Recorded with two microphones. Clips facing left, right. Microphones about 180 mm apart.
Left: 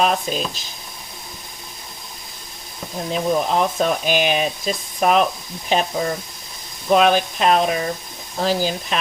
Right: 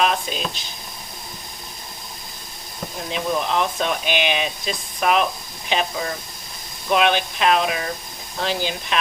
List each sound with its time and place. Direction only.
0.0 s speech: 40° left (ahead or behind)
3.1 s speech: 40° left (ahead or behind)
6.9 s speech: 40° left (ahead or behind)